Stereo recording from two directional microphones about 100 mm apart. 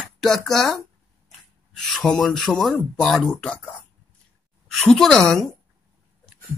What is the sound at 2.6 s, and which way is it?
Speech, 5° left (ahead or behind).